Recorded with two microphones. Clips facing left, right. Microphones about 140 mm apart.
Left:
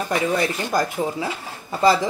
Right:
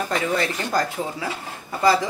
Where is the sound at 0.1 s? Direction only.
15° left (ahead or behind).